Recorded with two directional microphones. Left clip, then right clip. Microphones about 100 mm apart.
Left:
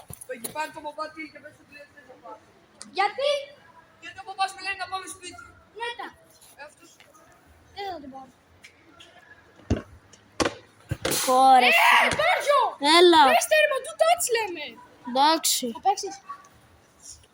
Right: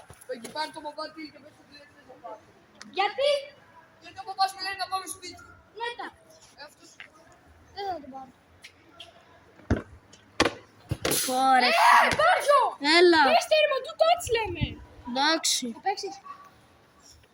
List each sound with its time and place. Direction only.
0.6 s a man's voice: 25° right (ahead or behind)
2.9 s a woman's voice: 10° right (ahead or behind)
5.7 s a woman's voice: 10° right (ahead or behind)
7.8 s a woman's voice: centre (ahead or behind)
9.7 s a sound: 25° left (ahead or behind)
10.4 s chop: centre (ahead or behind)
10.8 s cap gun: 15° right (ahead or behind)
11.5 s a woman's voice: centre (ahead or behind)
11.8 s speech: 15° left (ahead or behind)
12.8 s a woman's voice: 5° right (ahead or behind)
13.3 s a woman's voice: 10° left (ahead or behind)
15.1 s a woman's voice: 15° right (ahead or behind)